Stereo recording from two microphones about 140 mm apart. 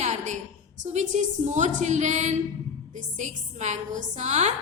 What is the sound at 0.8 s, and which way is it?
A woman's voice, 55° right (ahead or behind).